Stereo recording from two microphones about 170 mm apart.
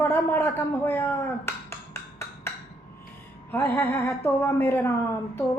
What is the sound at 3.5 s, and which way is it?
A woman's voice, 10° left (ahead or behind).